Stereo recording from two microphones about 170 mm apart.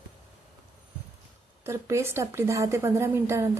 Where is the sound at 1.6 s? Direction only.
15° right (ahead or behind).